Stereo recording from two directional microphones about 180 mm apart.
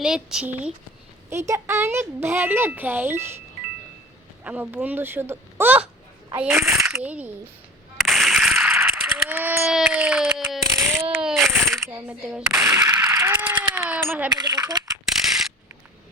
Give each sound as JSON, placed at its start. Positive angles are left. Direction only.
{"t": 0.0, "sound": "speech", "side_deg": -5}
{"t": 1.3, "sound": "speech", "side_deg": -15}
{"t": 4.4, "sound": "speech", "side_deg": -10}
{"t": 7.9, "sound": "a sound", "side_deg": 0}
{"t": 14.3, "sound": "speech", "side_deg": -25}
{"t": 15.0, "sound": "mechanisms", "side_deg": 0}